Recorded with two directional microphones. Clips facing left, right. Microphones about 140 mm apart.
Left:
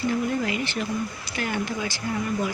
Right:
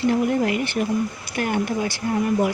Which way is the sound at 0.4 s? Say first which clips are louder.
Right 5 dB; 55° right (ahead or behind).